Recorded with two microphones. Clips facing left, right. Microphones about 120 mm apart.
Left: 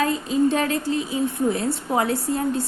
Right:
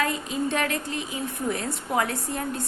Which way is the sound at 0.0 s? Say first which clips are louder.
Left 6 dB; 30° left (ahead or behind).